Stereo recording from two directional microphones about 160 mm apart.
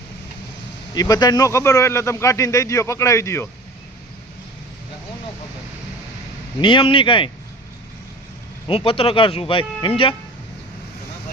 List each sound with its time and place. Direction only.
0.9 s speech: 25° left (ahead or behind)
6.6 s speech: 30° left (ahead or behind)
8.6 s speech: 35° left (ahead or behind)